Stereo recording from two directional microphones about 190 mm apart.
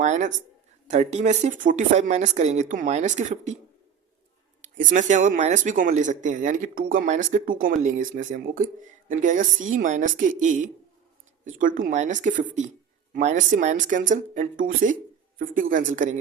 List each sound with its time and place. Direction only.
0.0 s speech: 40° right (ahead or behind)
4.6 s speech: 40° right (ahead or behind)